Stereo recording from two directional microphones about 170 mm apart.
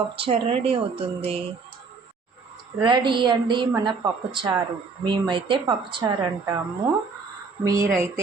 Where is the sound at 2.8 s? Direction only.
30° right (ahead or behind).